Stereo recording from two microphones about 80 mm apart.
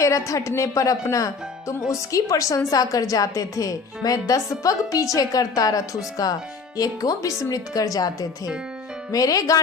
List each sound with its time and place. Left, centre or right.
0.0 s speech: left